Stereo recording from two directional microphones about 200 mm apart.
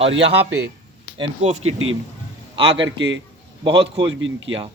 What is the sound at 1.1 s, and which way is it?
Speech, 30° right (ahead or behind).